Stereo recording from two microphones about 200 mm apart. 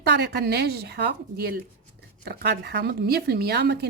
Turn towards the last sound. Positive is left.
turn(degrees=-55)  # may be behind; listen again after turning